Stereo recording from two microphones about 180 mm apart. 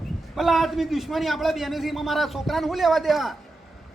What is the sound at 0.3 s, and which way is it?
A man's voice, centre (ahead or behind).